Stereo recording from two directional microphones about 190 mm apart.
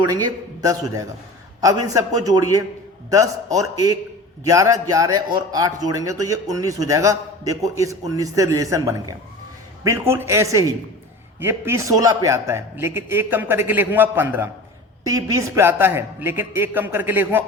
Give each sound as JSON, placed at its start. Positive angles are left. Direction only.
{"t": 0.0, "sound": "a man's voice", "side_deg": -20}